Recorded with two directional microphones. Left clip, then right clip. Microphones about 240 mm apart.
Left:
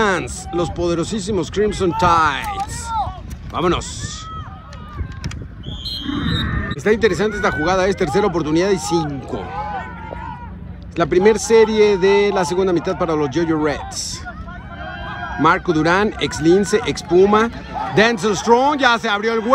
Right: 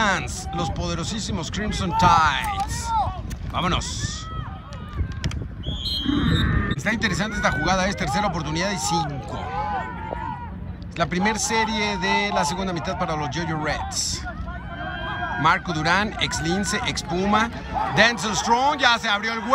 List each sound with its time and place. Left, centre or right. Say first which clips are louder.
0.0 s a man's voice: left 4 dB; centre
2.5 s speech: left 1 dB; right
3.5 s a man's voice: left 5 dB; centre
6.0 s speech: left 2 dB; left
6.8 s a man's voice: left 11 dB; centre
11.0 s a man's voice: left 9 dB; centre
15.4 s a man's voice: left 6 dB; centre